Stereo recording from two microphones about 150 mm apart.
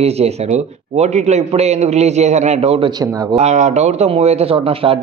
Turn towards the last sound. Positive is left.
turn(degrees=-40)  # may be behind; listen again after turning